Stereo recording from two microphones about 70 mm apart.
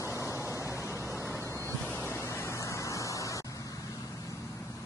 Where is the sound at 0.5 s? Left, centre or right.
Left.